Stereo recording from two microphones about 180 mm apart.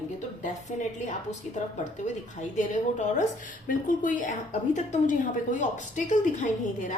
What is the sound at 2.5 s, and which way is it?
A woman's voice, 45° left (ahead or behind).